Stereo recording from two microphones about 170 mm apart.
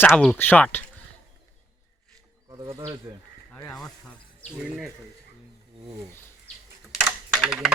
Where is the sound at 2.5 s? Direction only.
20° right (ahead or behind).